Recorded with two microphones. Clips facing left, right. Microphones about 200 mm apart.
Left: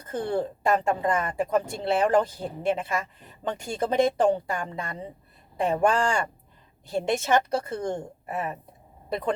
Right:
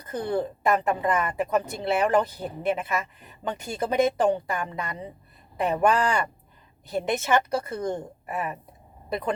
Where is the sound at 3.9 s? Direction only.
30° left (ahead or behind).